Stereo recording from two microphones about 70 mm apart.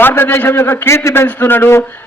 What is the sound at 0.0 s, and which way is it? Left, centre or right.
A man's voice, left.